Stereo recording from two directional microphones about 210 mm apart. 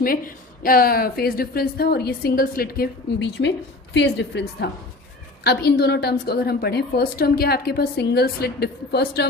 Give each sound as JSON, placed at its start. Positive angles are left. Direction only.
{"t": 0.0, "sound": "a woman's voice", "side_deg": 45}